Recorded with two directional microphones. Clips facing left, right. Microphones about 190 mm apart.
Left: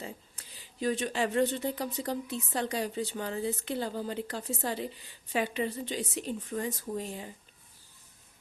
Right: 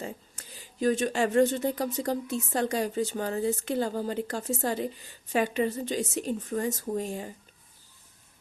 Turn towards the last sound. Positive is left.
turn(degrees=-45)  # may be behind; listen again after turning